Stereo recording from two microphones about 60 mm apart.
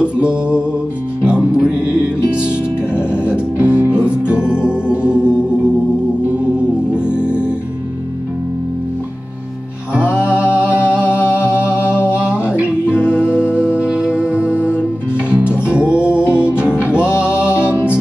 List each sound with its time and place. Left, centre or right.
0.0 s music: centre
9.9 s music: centre
11.8 s a sound: left
12.1 s music: centre